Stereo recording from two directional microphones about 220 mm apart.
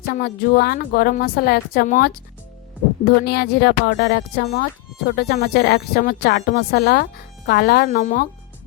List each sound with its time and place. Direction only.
0.2 s a woman's voice: 45° left (ahead or behind)